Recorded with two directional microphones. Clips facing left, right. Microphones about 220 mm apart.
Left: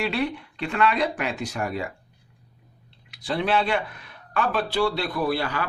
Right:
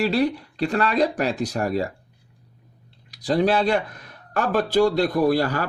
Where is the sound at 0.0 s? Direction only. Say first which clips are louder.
Right 5 dB; 35° right (ahead or behind).